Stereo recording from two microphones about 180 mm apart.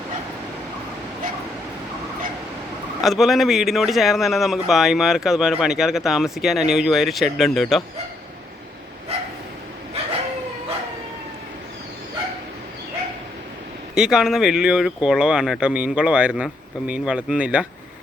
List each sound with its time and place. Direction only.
3.0 s a man's voice: centre (ahead or behind)
9.1 s dog: 35° right (ahead or behind)
13.9 s a man's voice: 5° right (ahead or behind)